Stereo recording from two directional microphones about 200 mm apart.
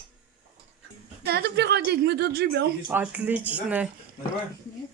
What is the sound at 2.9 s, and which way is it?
Speech, 10° right (ahead or behind).